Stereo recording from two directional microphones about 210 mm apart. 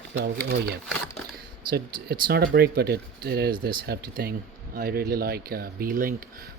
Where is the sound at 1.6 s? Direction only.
45° right (ahead or behind).